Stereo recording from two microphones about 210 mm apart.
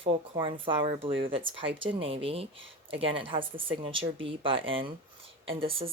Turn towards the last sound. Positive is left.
turn(degrees=-25)  # may be behind; listen again after turning